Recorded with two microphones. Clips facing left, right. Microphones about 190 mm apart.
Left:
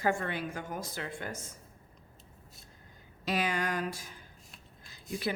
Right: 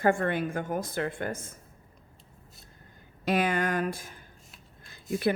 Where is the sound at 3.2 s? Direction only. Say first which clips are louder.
Right 5 dB; 55° right (ahead or behind).